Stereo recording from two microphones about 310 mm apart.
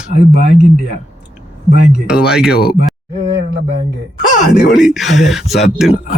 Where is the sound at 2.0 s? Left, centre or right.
Centre.